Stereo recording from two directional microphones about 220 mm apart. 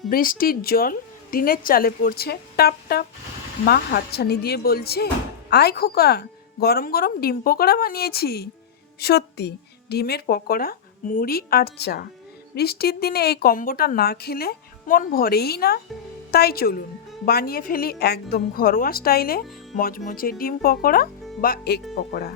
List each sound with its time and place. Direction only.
0.1 s a woman's voice: 40° left (ahead or behind)